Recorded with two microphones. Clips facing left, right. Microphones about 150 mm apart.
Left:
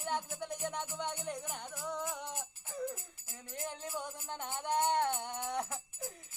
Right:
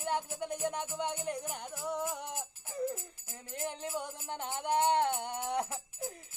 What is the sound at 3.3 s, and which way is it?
Music, 60° right (ahead or behind).